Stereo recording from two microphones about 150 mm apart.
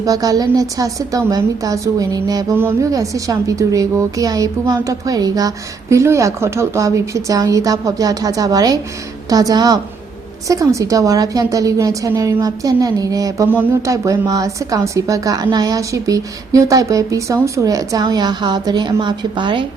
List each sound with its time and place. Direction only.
0.0 s a woman's voice: 25° right (ahead or behind)